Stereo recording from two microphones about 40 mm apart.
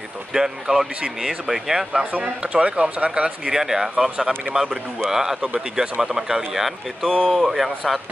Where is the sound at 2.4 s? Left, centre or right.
Right.